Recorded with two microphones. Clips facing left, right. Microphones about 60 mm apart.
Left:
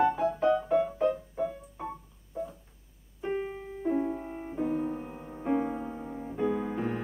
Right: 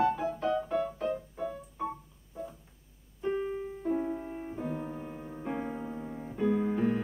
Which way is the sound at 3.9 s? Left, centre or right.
Centre.